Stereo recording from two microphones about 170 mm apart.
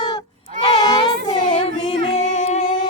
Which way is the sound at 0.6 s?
20° left (ahead or behind).